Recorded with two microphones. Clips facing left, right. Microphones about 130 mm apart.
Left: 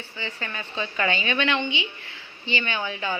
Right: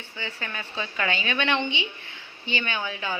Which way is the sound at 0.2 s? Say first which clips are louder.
Left 1 dB; 10° right (ahead or behind).